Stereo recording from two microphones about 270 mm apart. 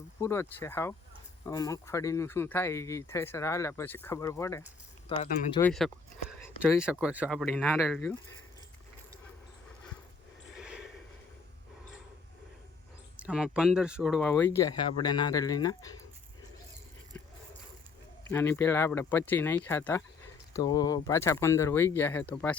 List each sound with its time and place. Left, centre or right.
0.2 s speech: centre
5.6 s speech: centre
10.6 s a sound: centre
13.1 s speech: centre
18.3 s speech: centre